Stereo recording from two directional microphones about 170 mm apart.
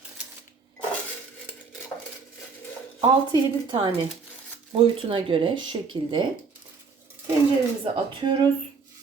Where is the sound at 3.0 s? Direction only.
30° right (ahead or behind).